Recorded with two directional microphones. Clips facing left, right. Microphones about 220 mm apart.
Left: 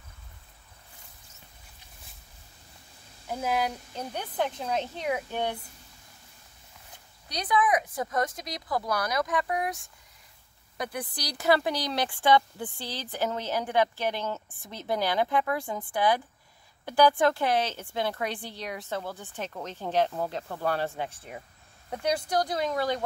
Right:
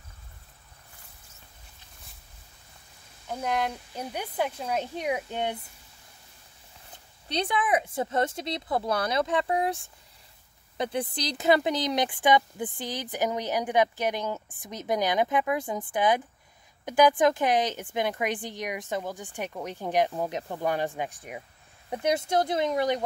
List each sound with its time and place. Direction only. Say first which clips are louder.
3.3 s speech: even; 5° left (ahead or behind)
3.9 s speech: right 1 dB; 10° right (ahead or behind)
7.2 s speech: left 1 dB; 25° right (ahead or behind)